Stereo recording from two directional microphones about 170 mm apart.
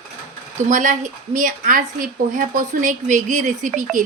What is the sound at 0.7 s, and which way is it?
Speech, 50° right (ahead or behind).